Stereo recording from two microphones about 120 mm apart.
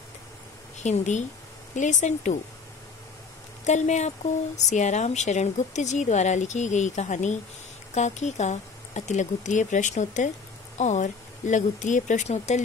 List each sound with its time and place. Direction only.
0.7 s speech: 75° left (ahead or behind)
1.8 s speech: 90° left
3.6 s a woman's voice: 80° left